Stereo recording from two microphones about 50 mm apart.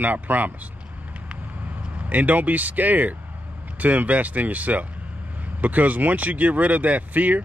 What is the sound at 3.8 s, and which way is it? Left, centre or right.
Speech, right.